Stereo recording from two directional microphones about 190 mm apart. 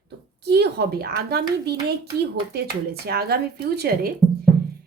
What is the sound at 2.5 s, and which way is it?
Speech, 55° right (ahead or behind).